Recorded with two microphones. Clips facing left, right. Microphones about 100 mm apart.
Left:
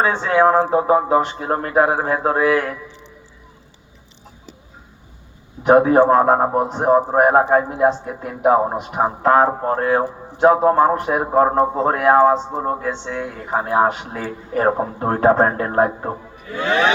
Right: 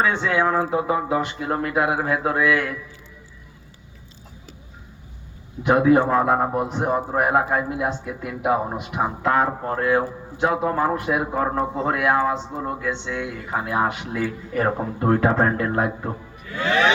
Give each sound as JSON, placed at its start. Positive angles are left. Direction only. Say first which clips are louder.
{"t": 0.0, "sound": "speech", "louder": "left 5 dB", "side_deg": 35}
{"t": 5.6, "sound": "speech", "louder": "left 5 dB", "side_deg": 35}